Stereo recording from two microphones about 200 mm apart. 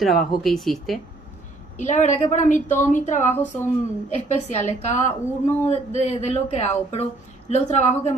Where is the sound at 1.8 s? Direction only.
35° left (ahead or behind).